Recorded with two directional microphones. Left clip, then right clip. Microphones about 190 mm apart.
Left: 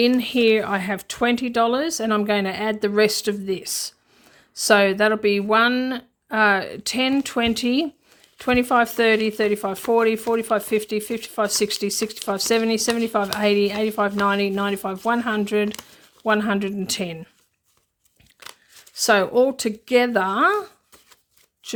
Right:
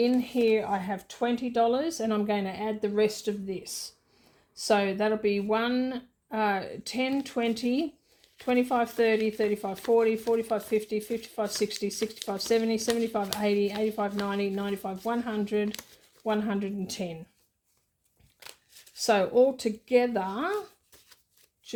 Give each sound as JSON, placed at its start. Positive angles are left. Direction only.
{"t": 0.0, "sound": "speech", "side_deg": 45}
{"t": 18.9, "sound": "speech", "side_deg": 30}
{"t": 21.6, "sound": "speech", "side_deg": 35}